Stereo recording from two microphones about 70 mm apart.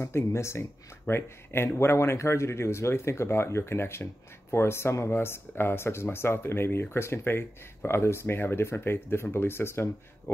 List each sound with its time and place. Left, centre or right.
0.0 s speech: left